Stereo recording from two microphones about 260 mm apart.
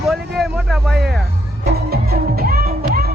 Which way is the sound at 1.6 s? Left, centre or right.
Right.